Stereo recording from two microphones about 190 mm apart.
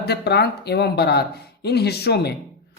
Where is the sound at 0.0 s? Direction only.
60° left (ahead or behind).